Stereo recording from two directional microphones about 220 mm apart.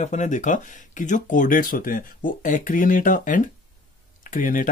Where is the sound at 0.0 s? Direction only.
35° left (ahead or behind).